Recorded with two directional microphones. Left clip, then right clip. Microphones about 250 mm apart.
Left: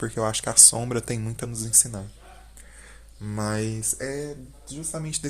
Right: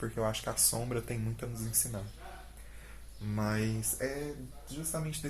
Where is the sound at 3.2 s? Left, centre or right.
Left.